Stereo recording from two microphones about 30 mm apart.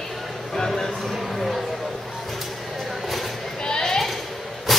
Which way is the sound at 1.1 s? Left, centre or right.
Centre.